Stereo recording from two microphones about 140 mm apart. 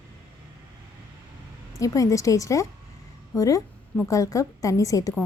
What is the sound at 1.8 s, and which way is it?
A woman's voice, 25° left (ahead or behind).